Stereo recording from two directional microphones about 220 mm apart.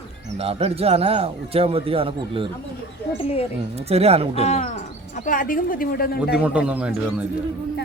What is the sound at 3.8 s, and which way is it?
Speech, 30° right (ahead or behind).